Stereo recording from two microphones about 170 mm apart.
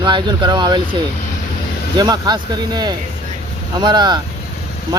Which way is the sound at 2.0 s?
25° right (ahead or behind).